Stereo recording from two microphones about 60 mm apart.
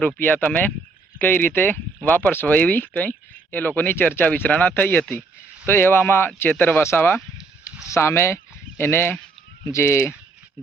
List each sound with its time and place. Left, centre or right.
0.2 s speech: left
7.9 s speech: left